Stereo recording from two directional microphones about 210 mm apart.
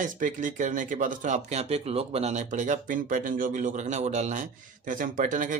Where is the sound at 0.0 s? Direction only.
40° right (ahead or behind).